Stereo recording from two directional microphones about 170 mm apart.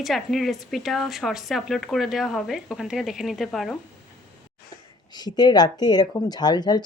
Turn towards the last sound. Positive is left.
turn(degrees=25)  # may be behind; listen again after turning